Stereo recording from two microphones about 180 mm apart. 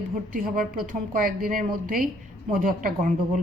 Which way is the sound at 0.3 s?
50° right (ahead or behind).